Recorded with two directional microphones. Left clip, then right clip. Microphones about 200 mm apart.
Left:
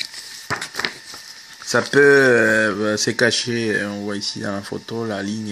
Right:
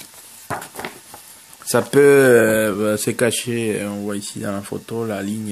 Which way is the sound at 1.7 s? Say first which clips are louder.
Even; 10° right (ahead or behind).